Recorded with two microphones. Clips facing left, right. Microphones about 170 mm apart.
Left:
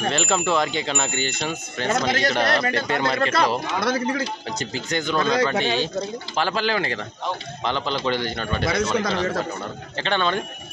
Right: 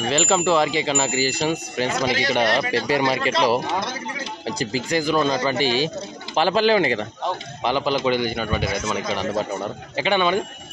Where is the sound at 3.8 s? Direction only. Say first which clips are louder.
Left 6 dB; 65° left (ahead or behind).